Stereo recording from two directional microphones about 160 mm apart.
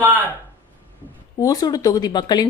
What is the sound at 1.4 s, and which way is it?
A woman's voice, 25° left (ahead or behind).